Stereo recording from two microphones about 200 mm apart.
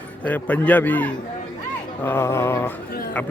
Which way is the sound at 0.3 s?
5° left (ahead or behind).